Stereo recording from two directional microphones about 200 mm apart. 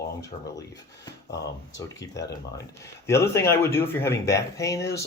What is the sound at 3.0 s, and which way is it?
Speech, 15° left (ahead or behind).